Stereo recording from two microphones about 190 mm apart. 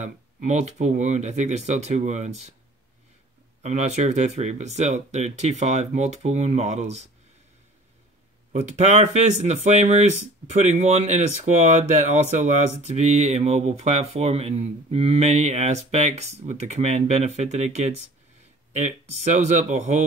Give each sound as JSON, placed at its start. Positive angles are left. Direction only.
{"t": 0.0, "sound": "speech", "side_deg": -40}
{"t": 3.6, "sound": "speech", "side_deg": -35}
{"t": 8.5, "sound": "speech", "side_deg": -35}
{"t": 18.8, "sound": "speech", "side_deg": -40}